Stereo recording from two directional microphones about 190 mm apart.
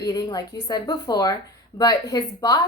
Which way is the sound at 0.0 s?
20° left (ahead or behind).